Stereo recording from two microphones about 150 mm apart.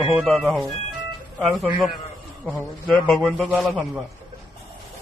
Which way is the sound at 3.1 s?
Centre (ahead or behind).